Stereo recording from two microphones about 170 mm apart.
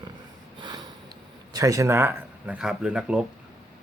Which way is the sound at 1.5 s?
20° right (ahead or behind).